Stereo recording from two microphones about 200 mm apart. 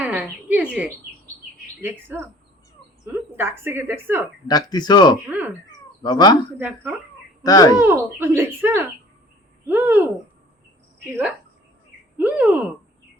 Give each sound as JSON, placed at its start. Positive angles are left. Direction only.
{"t": 0.0, "sound": "a sound", "side_deg": -5}
{"t": 1.8, "sound": "speech", "side_deg": -10}
{"t": 3.3, "sound": "speech", "side_deg": -10}
{"t": 4.4, "sound": "speech", "side_deg": 20}
{"t": 5.3, "sound": "speech", "side_deg": -10}
{"t": 5.6, "sound": "cat", "side_deg": 20}
{"t": 6.6, "sound": "speech", "side_deg": -10}
{"t": 7.4, "sound": "speech", "side_deg": 20}
{"t": 7.8, "sound": "speech", "side_deg": -10}
{"t": 12.1, "sound": "speech", "side_deg": -5}